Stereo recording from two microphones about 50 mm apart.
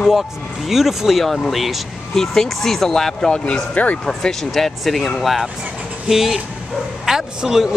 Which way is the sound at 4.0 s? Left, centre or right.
Centre.